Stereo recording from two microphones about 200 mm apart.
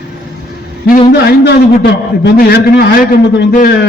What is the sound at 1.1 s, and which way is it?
A man's voice, 55° left (ahead or behind).